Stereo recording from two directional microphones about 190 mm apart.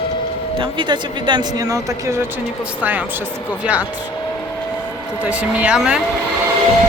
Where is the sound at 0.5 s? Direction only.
25° right (ahead or behind).